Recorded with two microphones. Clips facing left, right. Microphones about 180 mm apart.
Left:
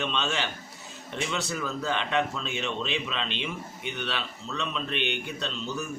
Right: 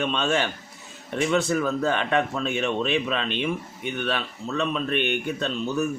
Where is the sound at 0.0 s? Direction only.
50° right (ahead or behind).